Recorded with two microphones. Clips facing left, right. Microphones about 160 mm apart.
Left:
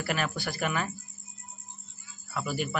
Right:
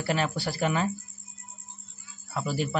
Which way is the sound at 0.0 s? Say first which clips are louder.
Right 3 dB; 30° right (ahead or behind).